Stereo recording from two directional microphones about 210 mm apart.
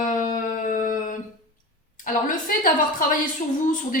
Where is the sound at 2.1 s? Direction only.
40° left (ahead or behind).